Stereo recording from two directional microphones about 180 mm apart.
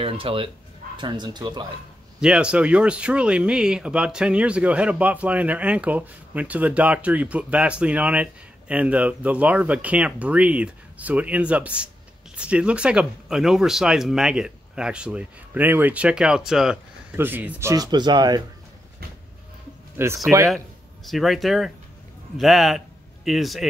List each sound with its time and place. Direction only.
0.0 s speech: 30° right (ahead or behind)
2.1 s speech: 5° right (ahead or behind); by 18.4 s 25° right (ahead or behind)
20.0 s speech: 15° right (ahead or behind)
20.4 s speech: centre (ahead or behind)